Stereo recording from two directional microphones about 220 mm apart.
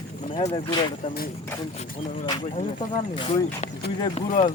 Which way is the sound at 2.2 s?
20° left (ahead or behind).